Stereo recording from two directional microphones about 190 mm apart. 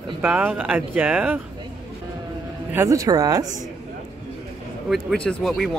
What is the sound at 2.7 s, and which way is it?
Speech, 15° right (ahead or behind).